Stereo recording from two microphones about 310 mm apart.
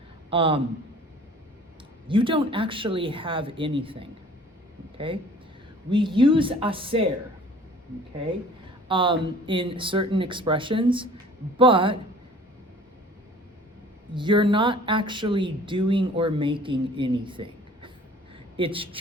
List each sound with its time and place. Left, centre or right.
0.3 s speech: centre
2.0 s speech: centre
8.9 s speech: centre
14.1 s speech: centre